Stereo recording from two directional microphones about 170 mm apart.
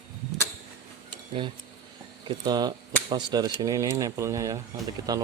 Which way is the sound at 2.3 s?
25° right (ahead or behind).